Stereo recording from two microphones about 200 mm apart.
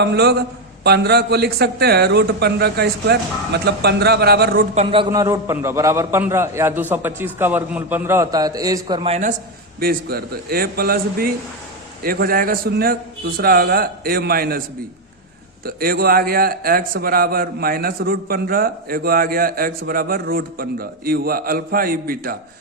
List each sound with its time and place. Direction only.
0.0 s a man's voice: 55° right (ahead or behind)
4.7 s a man's voice: 30° right (ahead or behind)
9.8 s a man's voice: 50° right (ahead or behind)
15.6 s a man's voice: 50° right (ahead or behind)